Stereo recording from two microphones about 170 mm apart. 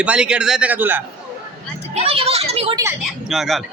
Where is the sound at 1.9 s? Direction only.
35° right (ahead or behind).